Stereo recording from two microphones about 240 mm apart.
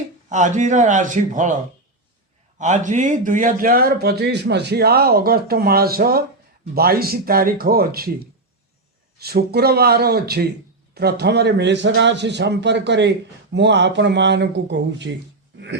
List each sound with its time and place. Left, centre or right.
0.3 s a man's voice: right
2.6 s a man's voice: right
9.1 s a man's voice: right
15.5 s dog: right